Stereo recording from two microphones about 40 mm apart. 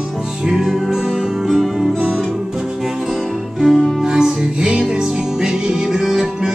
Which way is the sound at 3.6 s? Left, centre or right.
Centre.